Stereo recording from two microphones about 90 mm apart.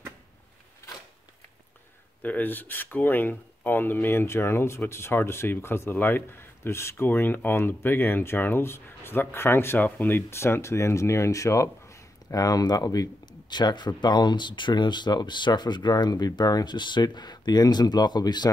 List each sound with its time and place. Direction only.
2.2 s speech: 20° left (ahead or behind); by 18.5 s 50° left (ahead or behind)